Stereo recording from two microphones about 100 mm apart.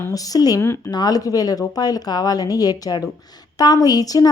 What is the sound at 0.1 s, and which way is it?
A woman's voice, 35° left (ahead or behind).